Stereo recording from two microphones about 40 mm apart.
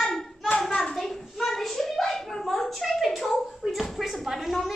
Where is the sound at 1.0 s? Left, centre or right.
Centre.